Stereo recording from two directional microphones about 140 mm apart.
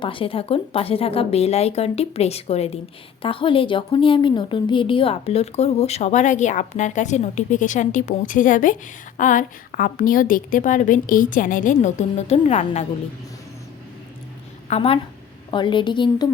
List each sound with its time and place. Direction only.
0.0 s a woman's voice: 40° left (ahead or behind)
14.7 s a woman's voice: 45° left (ahead or behind)